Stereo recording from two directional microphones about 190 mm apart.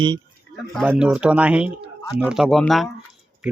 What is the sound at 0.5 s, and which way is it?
Speech, centre (ahead or behind).